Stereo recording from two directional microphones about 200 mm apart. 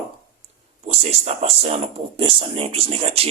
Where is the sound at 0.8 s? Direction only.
30° right (ahead or behind).